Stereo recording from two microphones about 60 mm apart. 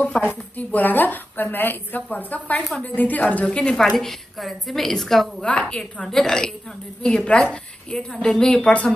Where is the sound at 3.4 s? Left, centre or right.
Centre.